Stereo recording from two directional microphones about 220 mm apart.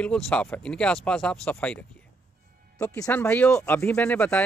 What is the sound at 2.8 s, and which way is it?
Speech, 10° left (ahead or behind).